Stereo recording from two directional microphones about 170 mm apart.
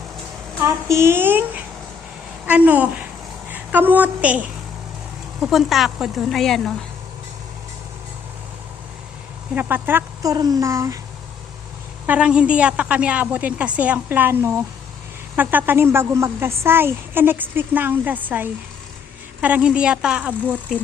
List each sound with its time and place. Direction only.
0.6 s a woman's voice: 15° right (ahead or behind); by 6.7 s centre (ahead or behind)
9.6 s a woman's voice: 10° right (ahead or behind)
10.3 s speech: 20° right (ahead or behind)
12.0 s a woman's voice: 5° right (ahead or behind)